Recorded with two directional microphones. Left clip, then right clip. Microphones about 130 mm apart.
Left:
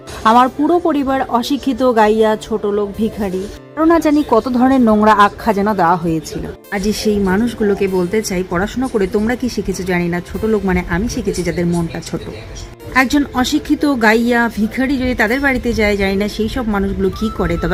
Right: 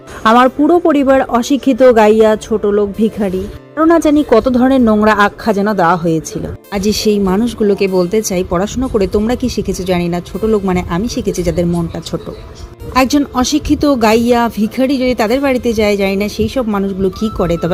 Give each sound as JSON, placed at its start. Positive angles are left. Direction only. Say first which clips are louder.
{"t": 0.2, "sound": "speech", "louder": "right 2 dB", "side_deg": -20}
{"t": 3.8, "sound": "speech", "louder": "right 3 dB", "side_deg": -5}
{"t": 4.4, "sound": "speech", "louder": "right 2 dB", "side_deg": 5}
{"t": 6.7, "sound": "speech", "louder": "right 3 dB", "side_deg": -30}
{"t": 13.1, "sound": "speech", "louder": "right 2 dB", "side_deg": -25}